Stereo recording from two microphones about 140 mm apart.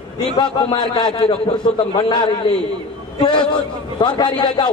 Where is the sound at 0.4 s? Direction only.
30° left (ahead or behind).